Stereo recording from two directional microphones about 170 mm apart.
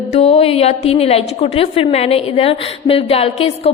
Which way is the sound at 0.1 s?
40° left (ahead or behind).